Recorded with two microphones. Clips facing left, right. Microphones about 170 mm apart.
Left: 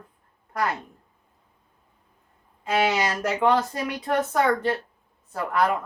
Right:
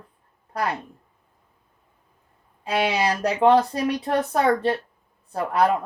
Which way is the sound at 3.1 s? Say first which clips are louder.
Right 4 dB; 30° right (ahead or behind).